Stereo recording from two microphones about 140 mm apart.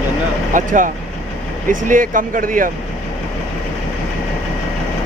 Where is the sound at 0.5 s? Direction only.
70° right (ahead or behind).